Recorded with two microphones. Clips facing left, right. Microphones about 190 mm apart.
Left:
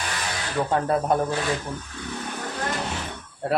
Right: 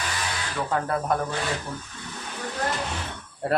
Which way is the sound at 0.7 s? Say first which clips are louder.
Left 3 dB; 25° left (ahead or behind).